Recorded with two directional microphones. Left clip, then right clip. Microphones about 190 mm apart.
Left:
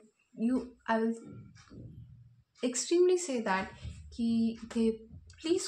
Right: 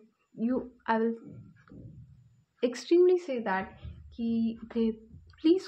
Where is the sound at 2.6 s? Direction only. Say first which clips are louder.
Right 4 dB; 35° right (ahead or behind).